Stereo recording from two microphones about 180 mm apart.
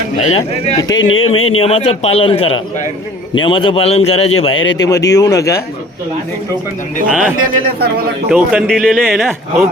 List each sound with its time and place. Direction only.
0.3 s a man's voice: 35° left (ahead or behind)
0.8 s a man's voice: 20° left (ahead or behind)
4.5 s speech: 90° left
5.0 s speech: 20° left (ahead or behind)
7.1 s speech: centre (ahead or behind)
7.4 s speech: 55° right (ahead or behind)
8.3 s speech: 5° right (ahead or behind)